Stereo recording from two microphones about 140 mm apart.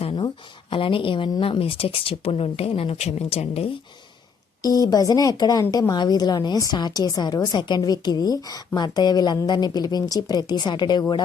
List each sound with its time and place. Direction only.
0.0 s a sound: 45° left (ahead or behind)
0.7 s speech: 40° left (ahead or behind)
4.6 s a woman's voice: 25° left (ahead or behind)